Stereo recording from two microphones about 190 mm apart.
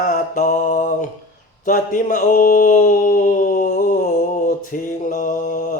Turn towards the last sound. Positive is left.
turn(degrees=45)  # may be behind; listen again after turning